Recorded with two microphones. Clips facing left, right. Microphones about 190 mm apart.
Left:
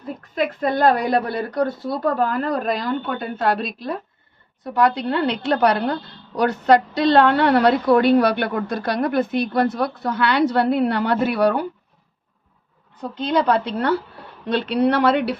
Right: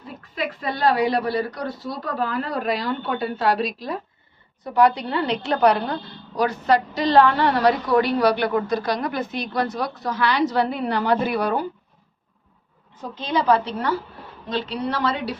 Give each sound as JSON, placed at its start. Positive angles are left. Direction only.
{"t": 0.2, "sound": "a woman's voice", "side_deg": 50}
{"t": 4.9, "sound": "a woman's voice", "side_deg": 60}
{"t": 13.3, "sound": "a woman's voice", "side_deg": 60}